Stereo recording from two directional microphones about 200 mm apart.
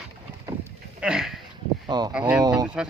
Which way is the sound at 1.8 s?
20° right (ahead or behind).